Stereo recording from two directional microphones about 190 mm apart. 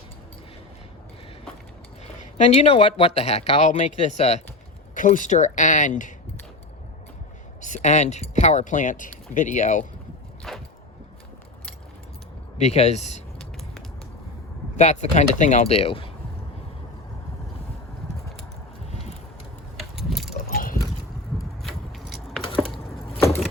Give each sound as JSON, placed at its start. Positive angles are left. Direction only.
{"t": 2.5, "sound": "speech", "side_deg": 35}
{"t": 7.6, "sound": "speech", "side_deg": 40}
{"t": 10.5, "sound": "a sound", "side_deg": 0}
{"t": 12.5, "sound": "speech", "side_deg": 35}
{"t": 14.8, "sound": "speech", "side_deg": 35}
{"t": 20.0, "sound": "keys jangling", "side_deg": 0}
{"t": 20.3, "sound": "clip-clop", "side_deg": 50}
{"t": 21.6, "sound": "a sound", "side_deg": 0}